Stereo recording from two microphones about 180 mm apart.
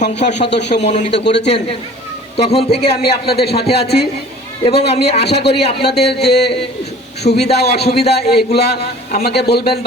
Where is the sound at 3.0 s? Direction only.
65° left (ahead or behind).